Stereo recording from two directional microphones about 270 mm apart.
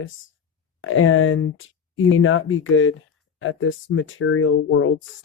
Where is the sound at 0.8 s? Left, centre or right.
Left.